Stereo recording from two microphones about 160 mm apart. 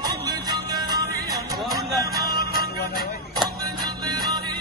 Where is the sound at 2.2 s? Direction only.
70° left (ahead or behind).